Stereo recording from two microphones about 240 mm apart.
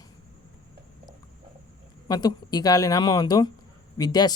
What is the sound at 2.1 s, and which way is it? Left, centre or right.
Speech, centre.